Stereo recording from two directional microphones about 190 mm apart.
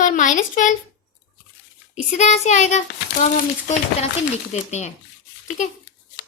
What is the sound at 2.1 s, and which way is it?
Speech, 35° left (ahead or behind).